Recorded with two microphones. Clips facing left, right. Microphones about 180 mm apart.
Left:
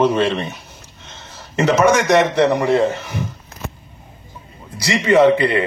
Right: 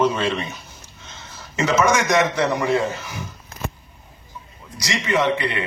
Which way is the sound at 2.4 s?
60° left (ahead or behind).